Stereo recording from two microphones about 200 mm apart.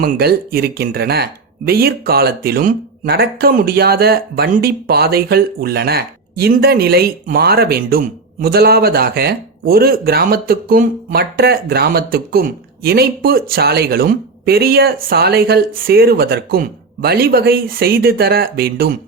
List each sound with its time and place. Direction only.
0.0 s speech: 50° right (ahead or behind)